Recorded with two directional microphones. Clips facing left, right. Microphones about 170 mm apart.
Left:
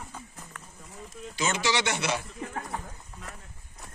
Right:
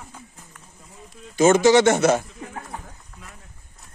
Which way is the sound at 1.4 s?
50° right (ahead or behind).